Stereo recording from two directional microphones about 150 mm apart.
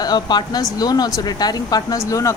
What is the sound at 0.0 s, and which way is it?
Speech, 30° left (ahead or behind).